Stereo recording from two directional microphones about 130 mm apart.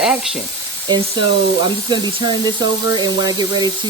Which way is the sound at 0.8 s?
35° right (ahead or behind).